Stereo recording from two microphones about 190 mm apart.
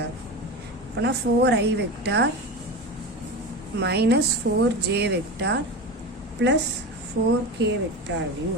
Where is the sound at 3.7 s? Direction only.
60° right (ahead or behind).